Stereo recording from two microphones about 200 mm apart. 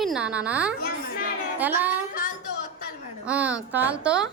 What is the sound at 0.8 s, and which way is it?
Speech, 50° left (ahead or behind).